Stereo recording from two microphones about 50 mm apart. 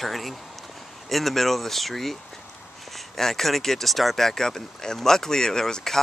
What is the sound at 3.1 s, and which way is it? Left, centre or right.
Speech, centre.